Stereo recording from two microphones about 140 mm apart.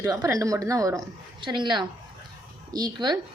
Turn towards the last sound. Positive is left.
turn(degrees=-30)  # may be behind; listen again after turning